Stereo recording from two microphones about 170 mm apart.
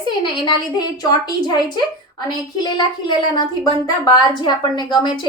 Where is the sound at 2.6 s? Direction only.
25° left (ahead or behind).